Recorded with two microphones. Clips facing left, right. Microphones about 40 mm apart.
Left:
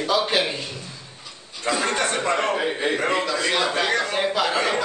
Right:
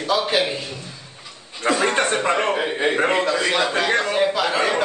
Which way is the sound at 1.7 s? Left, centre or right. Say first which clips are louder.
Right 3 dB; right.